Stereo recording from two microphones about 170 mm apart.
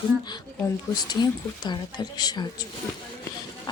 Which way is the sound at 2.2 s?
25° left (ahead or behind).